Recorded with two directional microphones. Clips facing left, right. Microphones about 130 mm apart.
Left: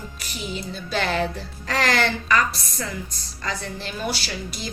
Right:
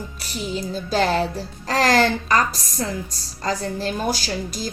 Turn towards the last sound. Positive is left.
turn(degrees=-40)  # may be behind; listen again after turning